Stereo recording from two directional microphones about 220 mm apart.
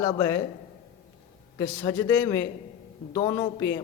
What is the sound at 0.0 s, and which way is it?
Speech, 15° left (ahead or behind).